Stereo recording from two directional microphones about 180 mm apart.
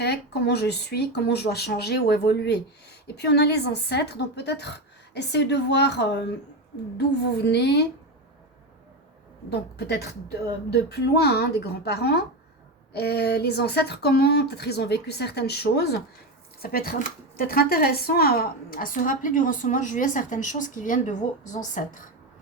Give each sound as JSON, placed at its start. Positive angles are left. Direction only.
{"t": 0.0, "sound": "speech", "side_deg": 65}
{"t": 9.5, "sound": "speech", "side_deg": 65}